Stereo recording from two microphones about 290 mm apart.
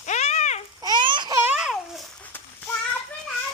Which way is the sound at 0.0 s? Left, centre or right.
Left.